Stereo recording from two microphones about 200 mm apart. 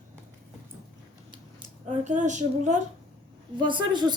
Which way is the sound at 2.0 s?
35° right (ahead or behind).